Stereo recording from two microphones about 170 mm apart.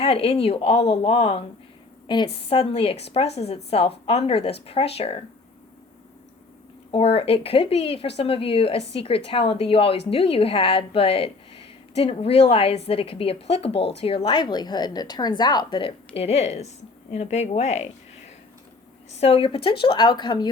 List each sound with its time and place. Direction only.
0.0 s a woman's voice: 35° left (ahead or behind)
6.9 s a woman's voice: 35° left (ahead or behind)
19.2 s a woman's voice: 35° left (ahead or behind)